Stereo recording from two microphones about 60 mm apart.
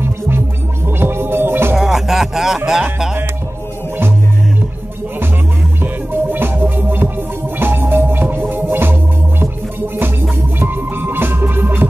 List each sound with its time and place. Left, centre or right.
0.8 s music: right
1.8 s music: centre
6.3 s music: right
10.6 s music: right